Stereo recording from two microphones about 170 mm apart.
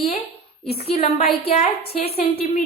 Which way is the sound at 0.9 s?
35° left (ahead or behind).